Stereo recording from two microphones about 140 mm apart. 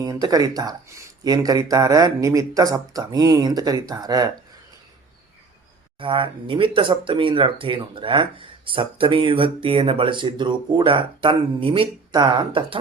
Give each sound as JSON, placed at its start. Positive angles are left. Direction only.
{"t": 0.0, "sound": "speech", "side_deg": -25}
{"t": 6.0, "sound": "speech", "side_deg": -40}